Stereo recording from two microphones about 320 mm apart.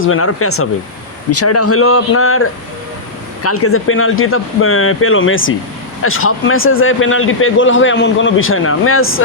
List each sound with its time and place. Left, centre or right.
0.0 s a man's voice: left